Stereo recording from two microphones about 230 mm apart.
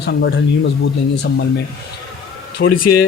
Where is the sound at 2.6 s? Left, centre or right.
Left.